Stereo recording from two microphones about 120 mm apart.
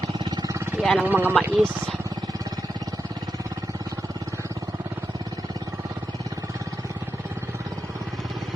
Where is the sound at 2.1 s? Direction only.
30° right (ahead or behind).